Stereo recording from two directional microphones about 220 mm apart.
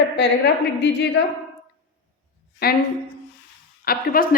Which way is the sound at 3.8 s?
40° left (ahead or behind).